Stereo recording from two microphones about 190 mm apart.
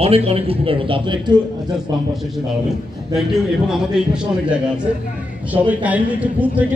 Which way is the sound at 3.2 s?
5° right (ahead or behind).